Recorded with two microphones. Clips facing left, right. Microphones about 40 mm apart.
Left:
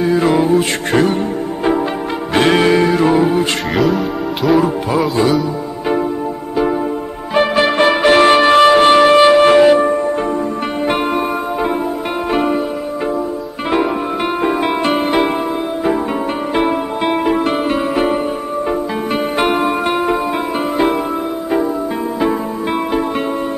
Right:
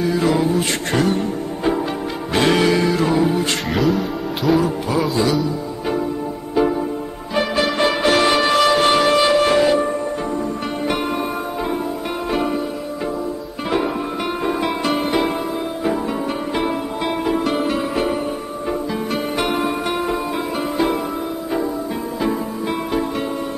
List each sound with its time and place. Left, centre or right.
0.0 s mantra: left
0.9 s music: left
3.7 s speech: centre
7.3 s music: left
12.3 s music: left
14.4 s music: left
16.6 s music: left
19.3 s music: left